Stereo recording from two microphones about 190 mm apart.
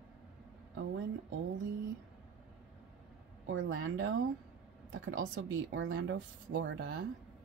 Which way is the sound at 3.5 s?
85° right.